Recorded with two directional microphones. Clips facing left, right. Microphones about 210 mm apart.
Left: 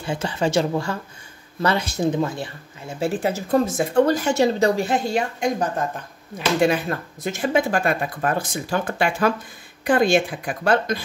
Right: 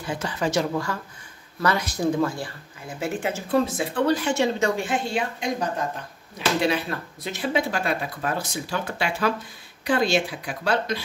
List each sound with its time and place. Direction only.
0.0 s speech: 30° left (ahead or behind); by 11.1 s 50° left (ahead or behind)